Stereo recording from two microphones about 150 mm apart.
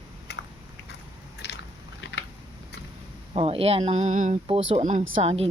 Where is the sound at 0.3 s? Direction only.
90° left.